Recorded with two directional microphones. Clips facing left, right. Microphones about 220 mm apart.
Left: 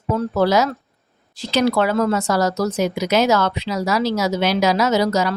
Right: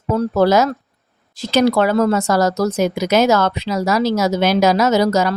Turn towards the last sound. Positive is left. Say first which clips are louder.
# right 3 dB
turn(degrees=-45)  # may be behind; listen again after turning